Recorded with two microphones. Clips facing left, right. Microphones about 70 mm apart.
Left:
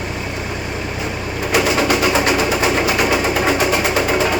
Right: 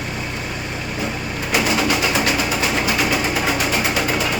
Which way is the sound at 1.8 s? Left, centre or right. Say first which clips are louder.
Left 3 dB; left.